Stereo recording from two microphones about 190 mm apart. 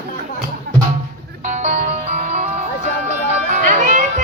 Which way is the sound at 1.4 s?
40° right (ahead or behind).